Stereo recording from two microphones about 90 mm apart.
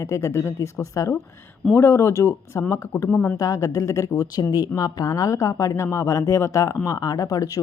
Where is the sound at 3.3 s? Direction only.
40° left (ahead or behind).